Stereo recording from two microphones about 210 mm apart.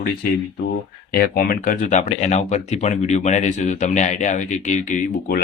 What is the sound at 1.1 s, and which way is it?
Speech, 45° left (ahead or behind).